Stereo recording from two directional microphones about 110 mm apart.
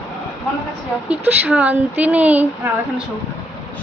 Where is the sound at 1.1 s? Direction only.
10° right (ahead or behind).